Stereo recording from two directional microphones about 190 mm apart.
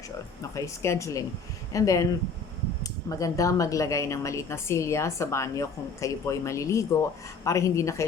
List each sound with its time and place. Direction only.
0.5 s speech: 15° left (ahead or behind)